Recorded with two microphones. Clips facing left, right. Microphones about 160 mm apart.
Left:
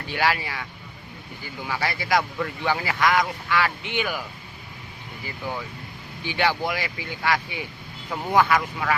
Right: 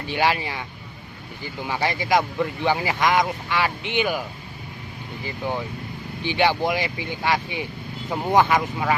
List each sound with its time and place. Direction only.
0.1 s speech: 20° right (ahead or behind)
5.2 s speech: 25° right (ahead or behind)